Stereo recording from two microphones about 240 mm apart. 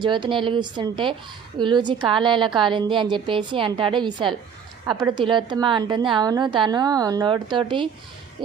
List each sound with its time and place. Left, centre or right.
0.0 s a woman's voice: centre